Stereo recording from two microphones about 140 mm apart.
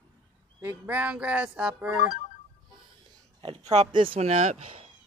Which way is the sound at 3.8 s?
35° right (ahead or behind).